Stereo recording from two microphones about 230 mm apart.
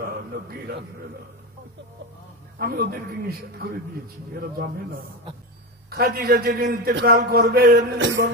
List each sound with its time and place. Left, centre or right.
0.0 s a sound: right
2.6 s a man's voice: right
5.9 s a man's voice: right